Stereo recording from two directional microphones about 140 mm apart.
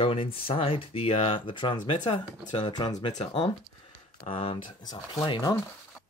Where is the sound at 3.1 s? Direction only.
45° left (ahead or behind).